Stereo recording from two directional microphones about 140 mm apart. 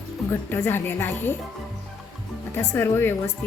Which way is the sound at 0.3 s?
15° left (ahead or behind).